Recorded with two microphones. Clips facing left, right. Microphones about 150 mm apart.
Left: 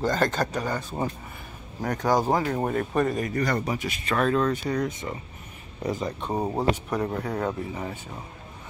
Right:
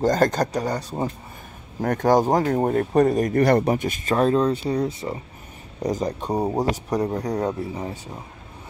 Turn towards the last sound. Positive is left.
turn(degrees=-30)  # may be behind; listen again after turning